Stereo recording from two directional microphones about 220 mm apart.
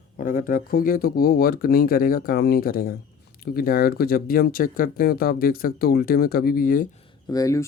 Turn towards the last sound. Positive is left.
turn(degrees=15)  # may be behind; listen again after turning